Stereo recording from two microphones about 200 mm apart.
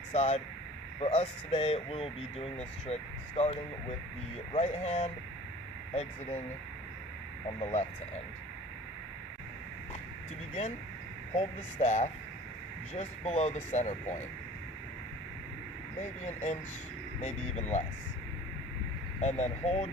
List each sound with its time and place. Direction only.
0.1 s speech: 35° left (ahead or behind)
7.6 s speech: 35° left (ahead or behind)
11.3 s speech: 35° left (ahead or behind)
16.2 s speech: 35° left (ahead or behind)
19.2 s speech: 35° left (ahead or behind)